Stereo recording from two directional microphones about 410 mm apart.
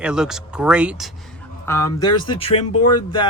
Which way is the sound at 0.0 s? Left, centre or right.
Centre.